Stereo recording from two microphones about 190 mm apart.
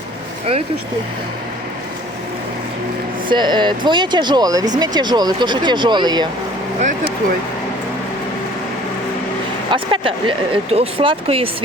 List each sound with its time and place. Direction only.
3.2 s speech: 25° right (ahead or behind)
9.7 s speech: 25° right (ahead or behind)